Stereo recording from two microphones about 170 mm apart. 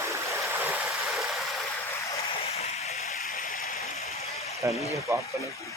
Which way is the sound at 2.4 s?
35° left (ahead or behind).